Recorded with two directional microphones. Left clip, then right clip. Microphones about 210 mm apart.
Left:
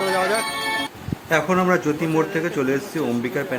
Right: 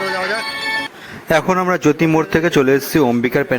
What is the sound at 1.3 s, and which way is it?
A man's voice, 40° right (ahead or behind).